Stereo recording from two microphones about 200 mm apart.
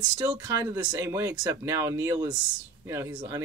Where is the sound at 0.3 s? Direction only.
15° right (ahead or behind).